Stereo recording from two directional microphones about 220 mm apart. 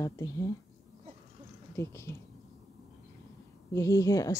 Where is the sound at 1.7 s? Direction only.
10° left (ahead or behind).